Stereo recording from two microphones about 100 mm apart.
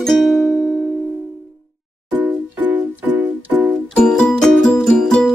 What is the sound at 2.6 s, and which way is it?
Music, 20° right (ahead or behind).